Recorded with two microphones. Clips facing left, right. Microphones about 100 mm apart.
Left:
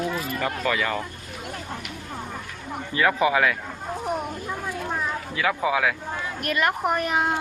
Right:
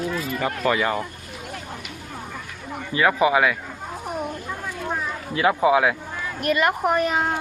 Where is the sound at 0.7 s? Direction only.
30° right (ahead or behind).